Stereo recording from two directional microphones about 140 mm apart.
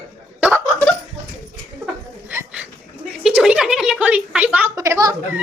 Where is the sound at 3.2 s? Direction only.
5° right (ahead or behind).